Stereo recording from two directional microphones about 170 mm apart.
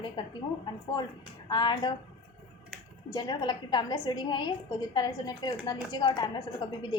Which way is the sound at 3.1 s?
25° left (ahead or behind).